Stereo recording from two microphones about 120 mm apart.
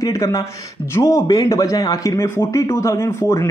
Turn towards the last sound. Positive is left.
turn(degrees=25)  # may be behind; listen again after turning